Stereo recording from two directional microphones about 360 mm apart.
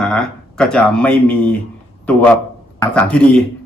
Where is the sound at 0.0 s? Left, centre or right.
Centre.